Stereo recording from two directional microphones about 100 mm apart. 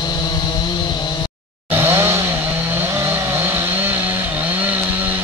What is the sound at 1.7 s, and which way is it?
Chainsaw, 25° right (ahead or behind).